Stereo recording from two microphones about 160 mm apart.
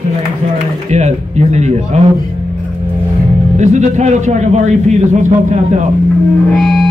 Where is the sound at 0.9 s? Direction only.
45° right (ahead or behind).